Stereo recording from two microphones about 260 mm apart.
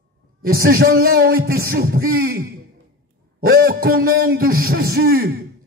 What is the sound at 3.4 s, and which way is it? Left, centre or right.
Speech, right.